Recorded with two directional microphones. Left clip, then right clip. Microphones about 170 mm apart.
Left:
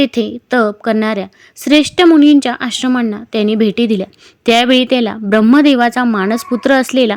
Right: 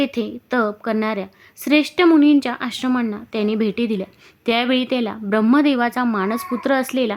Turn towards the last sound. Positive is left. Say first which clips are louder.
# left 8 dB
turn(degrees=30)  # may be behind; listen again after turning